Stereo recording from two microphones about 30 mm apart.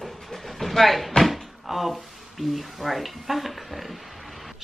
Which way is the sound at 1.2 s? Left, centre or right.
Centre.